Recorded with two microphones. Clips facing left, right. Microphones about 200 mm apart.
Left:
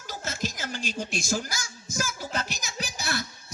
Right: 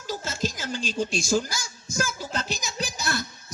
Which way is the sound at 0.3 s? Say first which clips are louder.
Even; 55° left (ahead or behind).